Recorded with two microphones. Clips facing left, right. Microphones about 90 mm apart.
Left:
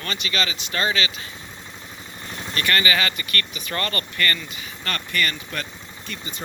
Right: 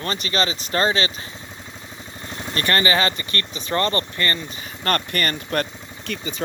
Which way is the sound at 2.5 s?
35° right (ahead or behind).